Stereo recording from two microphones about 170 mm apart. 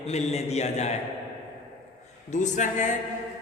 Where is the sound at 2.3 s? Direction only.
45° left (ahead or behind).